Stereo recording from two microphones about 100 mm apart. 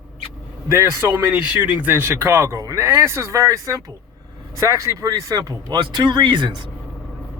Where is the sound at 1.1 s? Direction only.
15° right (ahead or behind).